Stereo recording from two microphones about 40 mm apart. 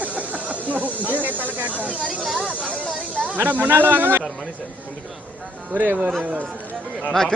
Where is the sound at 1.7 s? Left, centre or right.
Right.